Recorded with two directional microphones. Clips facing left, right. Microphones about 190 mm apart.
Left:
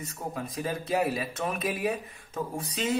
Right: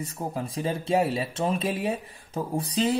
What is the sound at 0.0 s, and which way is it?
Speech, 30° right (ahead or behind).